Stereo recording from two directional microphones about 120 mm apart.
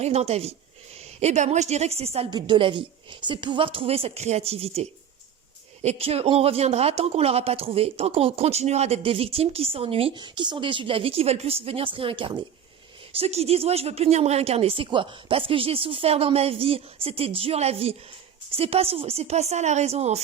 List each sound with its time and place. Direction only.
0.0 s speech: 65° right (ahead or behind)
1.2 s speech: 70° right (ahead or behind)
2.3 s a woman's voice: 40° right (ahead or behind)
13.1 s speech: 60° right (ahead or behind)